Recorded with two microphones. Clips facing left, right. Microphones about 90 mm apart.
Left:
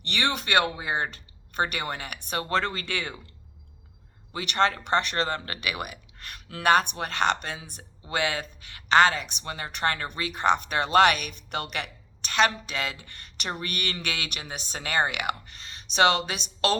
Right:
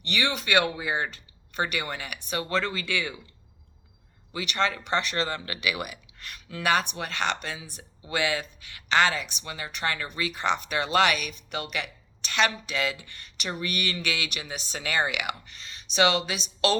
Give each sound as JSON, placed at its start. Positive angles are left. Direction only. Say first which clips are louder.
{"t": 0.0, "sound": "speech", "louder": "even", "side_deg": 50}
{"t": 4.3, "sound": "speech", "louder": "left 3 dB", "side_deg": 45}
{"t": 12.3, "sound": "speech", "louder": "left 2 dB", "side_deg": 40}